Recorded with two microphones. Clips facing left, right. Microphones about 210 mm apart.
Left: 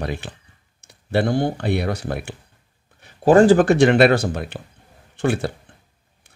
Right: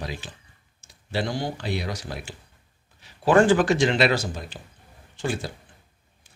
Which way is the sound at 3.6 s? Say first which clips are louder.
Left 7 dB; 60° left (ahead or behind).